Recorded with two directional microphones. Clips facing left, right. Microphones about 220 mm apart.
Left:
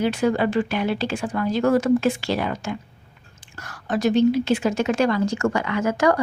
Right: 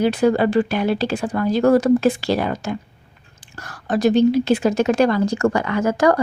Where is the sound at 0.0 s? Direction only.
35° right (ahead or behind).